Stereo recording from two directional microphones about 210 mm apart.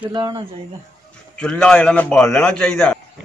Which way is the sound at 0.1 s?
20° right (ahead or behind).